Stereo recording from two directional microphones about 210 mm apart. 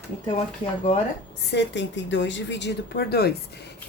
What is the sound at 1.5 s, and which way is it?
A woman's voice, 60° left (ahead or behind).